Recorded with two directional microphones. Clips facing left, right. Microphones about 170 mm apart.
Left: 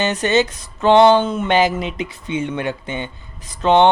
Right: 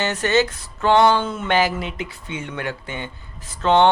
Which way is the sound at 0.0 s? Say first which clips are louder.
Left 2 dB; 20° left (ahead or behind).